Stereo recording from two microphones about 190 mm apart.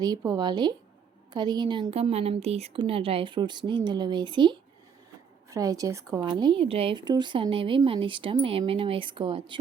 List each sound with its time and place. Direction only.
0.0 s speech: 20° right (ahead or behind)